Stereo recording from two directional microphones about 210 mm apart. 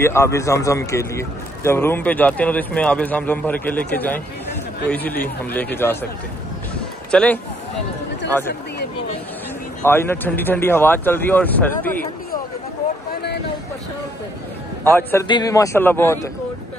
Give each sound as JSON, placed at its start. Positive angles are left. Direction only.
{"t": 0.0, "sound": "a man's voice", "side_deg": 10}
{"t": 7.1, "sound": "speech", "side_deg": 5}
{"t": 9.8, "sound": "a man's voice", "side_deg": 10}
{"t": 13.1, "sound": "a sound", "side_deg": 50}
{"t": 14.8, "sound": "a man's voice", "side_deg": 10}